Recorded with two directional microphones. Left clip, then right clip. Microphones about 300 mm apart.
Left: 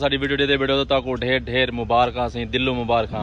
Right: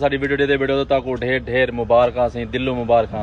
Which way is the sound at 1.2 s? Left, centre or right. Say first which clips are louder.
Right 2 dB; left.